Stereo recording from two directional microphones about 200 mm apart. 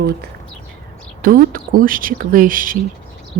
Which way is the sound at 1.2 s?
45° right (ahead or behind).